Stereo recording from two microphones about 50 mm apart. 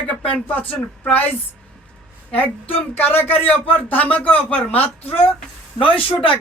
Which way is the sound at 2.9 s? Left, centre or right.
Left.